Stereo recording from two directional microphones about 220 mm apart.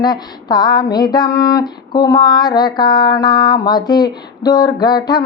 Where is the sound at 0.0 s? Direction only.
20° left (ahead or behind).